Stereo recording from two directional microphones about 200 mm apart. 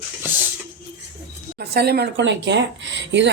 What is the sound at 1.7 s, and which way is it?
A woman's voice, 55° right (ahead or behind).